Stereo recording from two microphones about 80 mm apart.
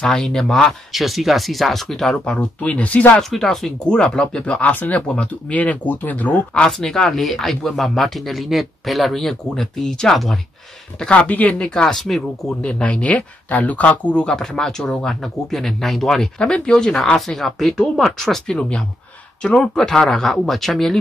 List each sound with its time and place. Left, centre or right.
0.0 s speech: centre
2.6 s speech: centre
3.2 s speech: centre; by 6.4 s left
6.5 s speech: centre
11.0 s speech: centre
11.7 s speech: centre